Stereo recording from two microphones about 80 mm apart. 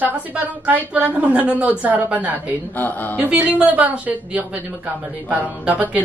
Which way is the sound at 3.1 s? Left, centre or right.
Centre.